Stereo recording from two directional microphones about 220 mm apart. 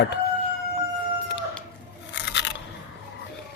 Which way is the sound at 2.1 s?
55° left (ahead or behind).